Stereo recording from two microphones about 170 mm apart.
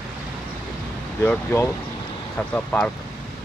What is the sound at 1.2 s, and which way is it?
Speech, 10° left (ahead or behind).